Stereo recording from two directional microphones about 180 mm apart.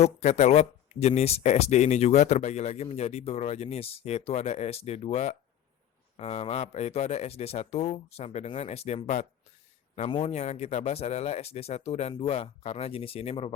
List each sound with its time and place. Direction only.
0.0 s speech: 40° left (ahead or behind)